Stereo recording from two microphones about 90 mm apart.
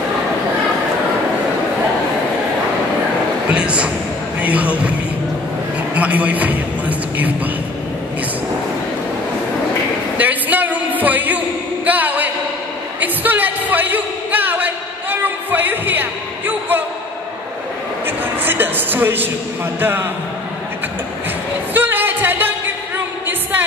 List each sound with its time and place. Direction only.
3.4 s speech: 10° right (ahead or behind)
5.9 s a man's voice: 15° right (ahead or behind)
10.1 s a sound: 20° right (ahead or behind)
13.0 s music: 20° right (ahead or behind)
18.0 s a sound: 25° right (ahead or behind)
19.8 s a man's voice: 25° right (ahead or behind)
21.7 s music: 20° right (ahead or behind)